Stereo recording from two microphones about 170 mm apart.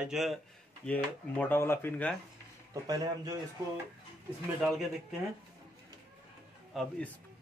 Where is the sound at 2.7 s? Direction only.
20° right (ahead or behind).